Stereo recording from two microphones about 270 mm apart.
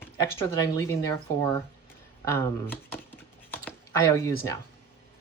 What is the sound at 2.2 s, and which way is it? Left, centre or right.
Speech, centre.